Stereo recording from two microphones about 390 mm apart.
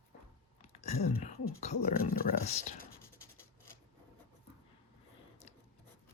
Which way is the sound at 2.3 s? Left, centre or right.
Centre.